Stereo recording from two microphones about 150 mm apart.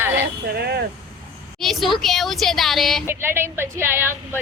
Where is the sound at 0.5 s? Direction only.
90° right.